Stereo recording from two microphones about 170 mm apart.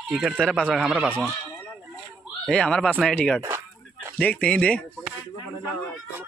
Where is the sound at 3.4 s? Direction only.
15° right (ahead or behind).